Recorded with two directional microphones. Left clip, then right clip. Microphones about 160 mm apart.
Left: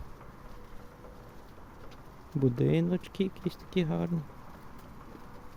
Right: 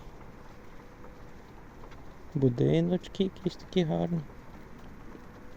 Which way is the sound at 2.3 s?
15° left (ahead or behind).